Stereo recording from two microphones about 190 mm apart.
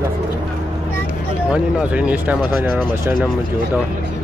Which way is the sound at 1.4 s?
5° right (ahead or behind).